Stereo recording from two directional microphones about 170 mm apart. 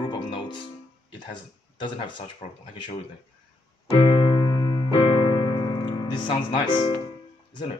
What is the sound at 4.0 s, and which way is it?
Electric piano, 30° left (ahead or behind).